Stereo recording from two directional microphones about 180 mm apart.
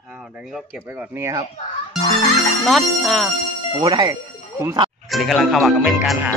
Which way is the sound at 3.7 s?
20° right (ahead or behind).